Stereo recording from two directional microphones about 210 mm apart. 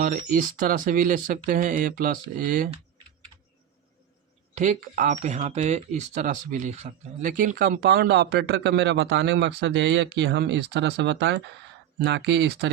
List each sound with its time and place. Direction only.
0.0 s speech: 40° right (ahead or behind)
4.5 s speech: 35° right (ahead or behind); by 12.7 s 55° right (ahead or behind)